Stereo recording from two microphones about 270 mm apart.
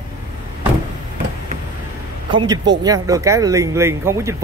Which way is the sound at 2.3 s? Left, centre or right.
Centre.